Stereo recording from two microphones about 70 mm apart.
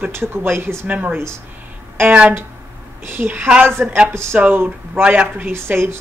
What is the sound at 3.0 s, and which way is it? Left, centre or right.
Speech, right.